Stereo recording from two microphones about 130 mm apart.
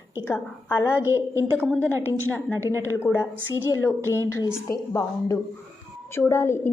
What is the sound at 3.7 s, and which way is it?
A woman's voice, 20° left (ahead or behind).